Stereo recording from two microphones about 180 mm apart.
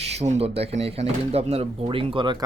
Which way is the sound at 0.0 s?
35° right (ahead or behind).